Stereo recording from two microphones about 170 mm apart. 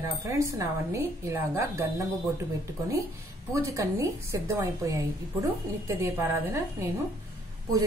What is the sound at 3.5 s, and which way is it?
A woman's voice, 15° right (ahead or behind).